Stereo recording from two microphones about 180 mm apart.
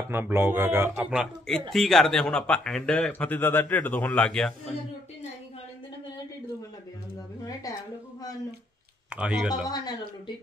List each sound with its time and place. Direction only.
0.1 s a man's voice: 10° right (ahead or behind); by 4.6 s 5° left (ahead or behind)
9.1 s speech: 5° right (ahead or behind)
9.7 s speech: 25° left (ahead or behind)